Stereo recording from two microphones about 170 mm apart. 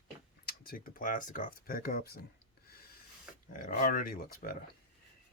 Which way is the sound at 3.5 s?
50° left (ahead or behind).